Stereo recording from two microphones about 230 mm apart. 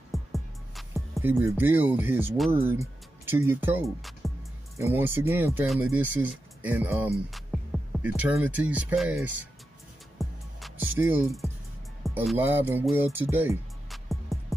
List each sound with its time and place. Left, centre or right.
0.1 s music: centre
1.5 s speech: centre
10.1 s music: centre
11.0 s speech: centre